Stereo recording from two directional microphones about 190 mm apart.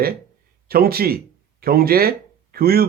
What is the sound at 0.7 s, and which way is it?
Speech, 55° right (ahead or behind).